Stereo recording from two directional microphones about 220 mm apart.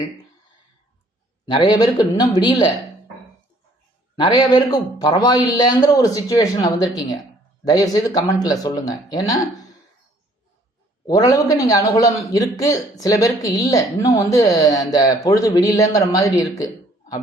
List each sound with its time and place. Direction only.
1.5 s a man's voice: 20° left (ahead or behind)
4.2 s a man's voice: 20° left (ahead or behind)
11.0 s a man's voice: 15° left (ahead or behind)